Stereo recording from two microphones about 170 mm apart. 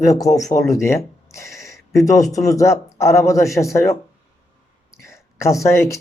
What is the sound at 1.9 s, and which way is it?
Speech, 20° left (ahead or behind).